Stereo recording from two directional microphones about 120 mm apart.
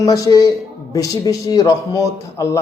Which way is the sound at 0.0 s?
30° left (ahead or behind).